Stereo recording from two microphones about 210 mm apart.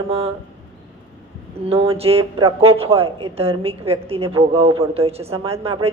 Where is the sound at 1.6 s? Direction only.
25° right (ahead or behind).